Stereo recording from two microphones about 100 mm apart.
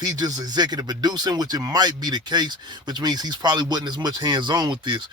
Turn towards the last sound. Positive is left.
turn(degrees=-50)  # may be behind; listen again after turning